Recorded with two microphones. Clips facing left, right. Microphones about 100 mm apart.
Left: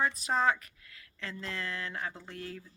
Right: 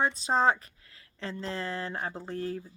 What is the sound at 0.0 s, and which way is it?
Speech, 30° right (ahead or behind).